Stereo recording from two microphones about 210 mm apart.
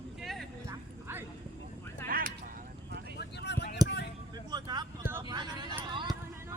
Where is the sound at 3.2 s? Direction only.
55° left (ahead or behind).